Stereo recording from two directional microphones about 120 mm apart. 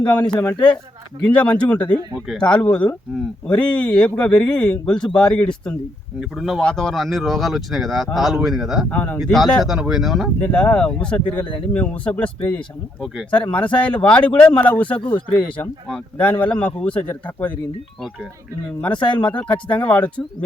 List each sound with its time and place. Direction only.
0.3 s speech: 10° left (ahead or behind)
8.9 s speech: 15° left (ahead or behind)
9.3 s speech: centre (ahead or behind)
10.4 s speech: 10° left (ahead or behind)
19.0 s speech: 10° left (ahead or behind)